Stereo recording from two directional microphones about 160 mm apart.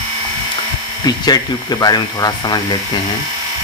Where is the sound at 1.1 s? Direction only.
25° left (ahead or behind).